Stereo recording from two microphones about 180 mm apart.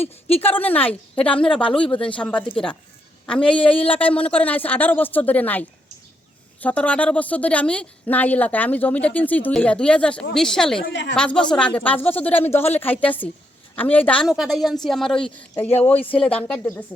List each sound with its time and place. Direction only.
0.4 s a woman's voice: 10° left (ahead or behind)
10.8 s a woman's voice: 70° left (ahead or behind)
11.1 s a woman's voice: 5° left (ahead or behind)